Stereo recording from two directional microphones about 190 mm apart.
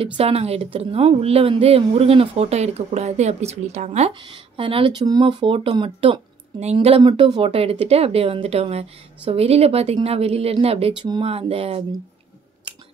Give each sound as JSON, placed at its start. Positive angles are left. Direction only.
{"t": 0.0, "sound": "speech", "side_deg": -30}
{"t": 7.0, "sound": "speech", "side_deg": -20}